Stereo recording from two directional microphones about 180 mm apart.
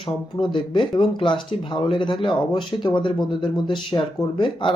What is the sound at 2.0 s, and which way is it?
Speech, 25° left (ahead or behind).